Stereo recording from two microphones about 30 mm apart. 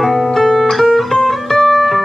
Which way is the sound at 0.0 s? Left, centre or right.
Centre.